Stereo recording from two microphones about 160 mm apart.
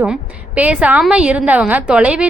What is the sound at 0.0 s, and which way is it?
A woman's voice, 10° right (ahead or behind).